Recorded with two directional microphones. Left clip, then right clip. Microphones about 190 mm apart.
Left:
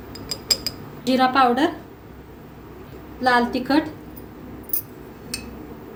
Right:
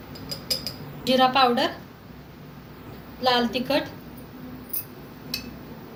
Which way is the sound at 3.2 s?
40° left (ahead or behind).